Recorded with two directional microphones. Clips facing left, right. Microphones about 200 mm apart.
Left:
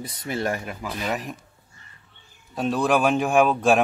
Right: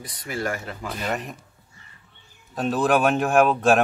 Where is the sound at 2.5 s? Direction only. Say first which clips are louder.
Right 1 dB; centre (ahead or behind).